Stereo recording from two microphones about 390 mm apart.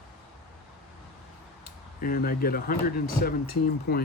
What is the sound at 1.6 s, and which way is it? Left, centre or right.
Speech, left.